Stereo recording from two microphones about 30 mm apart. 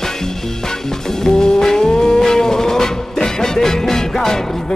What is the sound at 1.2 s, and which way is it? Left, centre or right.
Music, centre.